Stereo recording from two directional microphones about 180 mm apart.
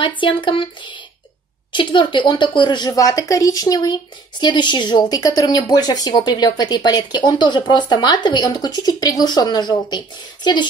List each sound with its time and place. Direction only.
0.0 s speech: 25° left (ahead or behind)